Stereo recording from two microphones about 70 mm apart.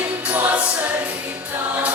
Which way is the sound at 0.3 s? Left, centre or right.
Right.